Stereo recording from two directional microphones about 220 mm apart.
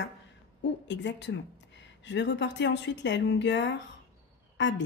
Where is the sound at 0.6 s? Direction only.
55° left (ahead or behind).